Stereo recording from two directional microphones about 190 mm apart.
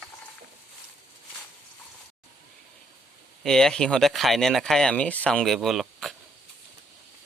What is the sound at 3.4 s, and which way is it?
Speech, centre (ahead or behind).